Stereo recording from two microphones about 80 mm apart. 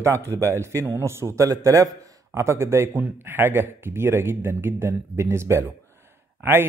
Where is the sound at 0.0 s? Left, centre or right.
Right.